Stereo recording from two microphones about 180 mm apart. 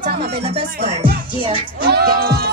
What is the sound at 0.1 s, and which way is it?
Speech, 60° right (ahead or behind).